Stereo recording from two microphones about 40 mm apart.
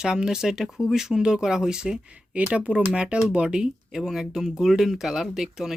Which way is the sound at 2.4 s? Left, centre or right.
Right.